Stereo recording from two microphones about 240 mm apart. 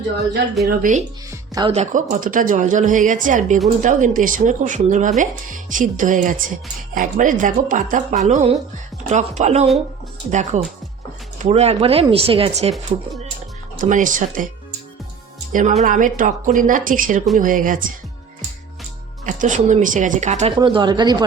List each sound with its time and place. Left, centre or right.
0.7 s speech: right
1.5 s speech: right
13.8 s speech: right
15.5 s speech: right
19.2 s speech: right
20.6 s speech: centre